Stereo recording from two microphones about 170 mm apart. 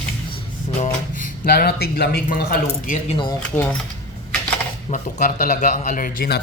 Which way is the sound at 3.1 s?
30° left (ahead or behind).